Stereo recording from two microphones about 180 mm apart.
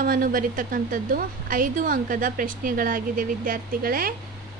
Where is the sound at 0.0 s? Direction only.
55° right (ahead or behind).